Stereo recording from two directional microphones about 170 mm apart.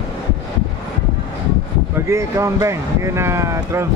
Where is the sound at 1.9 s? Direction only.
15° right (ahead or behind).